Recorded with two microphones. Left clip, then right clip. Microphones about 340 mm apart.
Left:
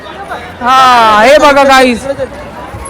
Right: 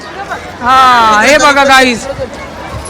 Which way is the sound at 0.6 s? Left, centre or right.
Centre.